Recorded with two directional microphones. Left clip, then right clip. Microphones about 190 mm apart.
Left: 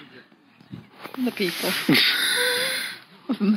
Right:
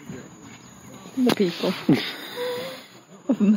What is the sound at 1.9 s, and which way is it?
Wheeze, 15° right (ahead or behind).